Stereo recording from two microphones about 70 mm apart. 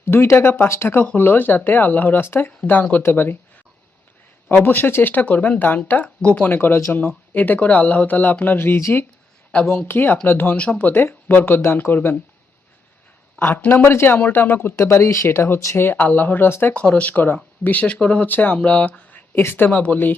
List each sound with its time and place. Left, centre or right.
0.0 s speech: left
4.5 s speech: left
9.5 s speech: centre
9.8 s speech: left
10.6 s speech: centre
13.4 s speech: left
14.8 s speech: left
16.0 s speech: left
16.7 s speech: centre